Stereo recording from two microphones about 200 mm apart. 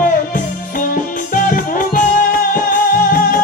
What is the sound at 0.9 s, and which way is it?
Music, 45° left (ahead or behind).